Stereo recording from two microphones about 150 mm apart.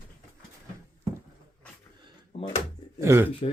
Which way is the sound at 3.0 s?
15° right (ahead or behind).